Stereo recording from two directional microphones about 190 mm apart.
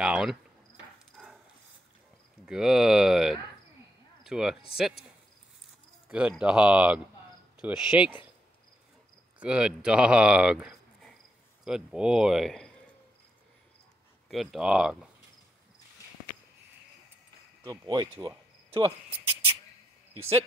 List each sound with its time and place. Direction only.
0.0 s speech: 5° right (ahead or behind)
1.1 s dog: 5° right (ahead or behind)
2.4 s speech: 5° right (ahead or behind)
6.0 s speech: 5° right (ahead or behind)
9.4 s speech: 5° right (ahead or behind)
14.3 s speech: centre (ahead or behind)
17.6 s speech: 20° right (ahead or behind)
18.7 s cricket: 30° right (ahead or behind)
20.2 s speech: 30° right (ahead or behind)